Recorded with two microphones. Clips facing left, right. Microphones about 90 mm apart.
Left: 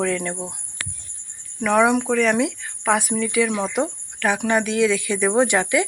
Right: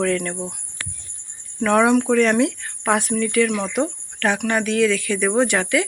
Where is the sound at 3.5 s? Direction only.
25° left (ahead or behind).